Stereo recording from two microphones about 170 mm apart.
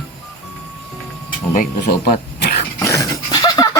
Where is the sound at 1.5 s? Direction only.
60° left (ahead or behind).